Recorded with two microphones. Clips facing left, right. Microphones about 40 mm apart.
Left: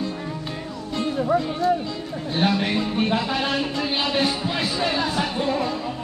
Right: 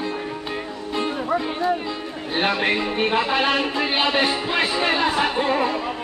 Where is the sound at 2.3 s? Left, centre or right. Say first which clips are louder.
Right 1 dB; right.